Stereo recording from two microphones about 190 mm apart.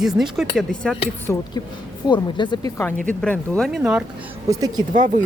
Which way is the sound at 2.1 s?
25° left (ahead or behind).